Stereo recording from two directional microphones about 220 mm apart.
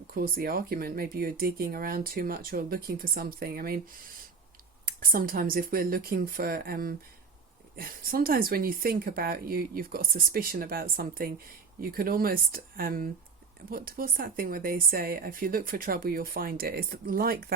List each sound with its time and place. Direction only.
0.1 s speech: 40° right (ahead or behind)
4.9 s speech: 40° right (ahead or behind)